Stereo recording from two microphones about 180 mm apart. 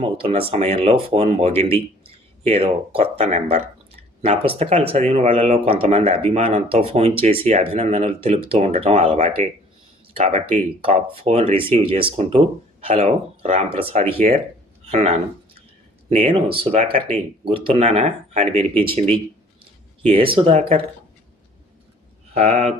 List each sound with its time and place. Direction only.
0.0 s speech: 30° right (ahead or behind)
22.4 s speech: 35° right (ahead or behind)